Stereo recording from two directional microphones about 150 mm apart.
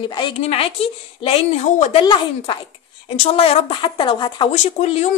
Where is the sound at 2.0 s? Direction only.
35° left (ahead or behind).